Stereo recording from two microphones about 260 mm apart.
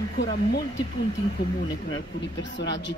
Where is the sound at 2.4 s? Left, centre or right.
Left.